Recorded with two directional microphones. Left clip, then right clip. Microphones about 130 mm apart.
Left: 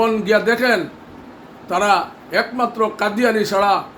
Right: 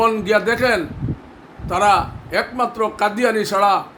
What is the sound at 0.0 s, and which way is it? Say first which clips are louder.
A man's voice: even; 25° right (ahead or behind).